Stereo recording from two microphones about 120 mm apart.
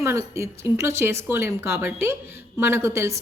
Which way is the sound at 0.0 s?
25° right (ahead or behind).